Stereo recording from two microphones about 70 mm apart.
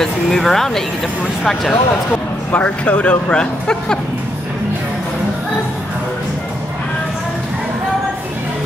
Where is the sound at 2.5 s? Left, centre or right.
Centre.